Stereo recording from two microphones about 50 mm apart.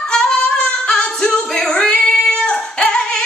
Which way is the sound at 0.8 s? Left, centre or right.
Centre.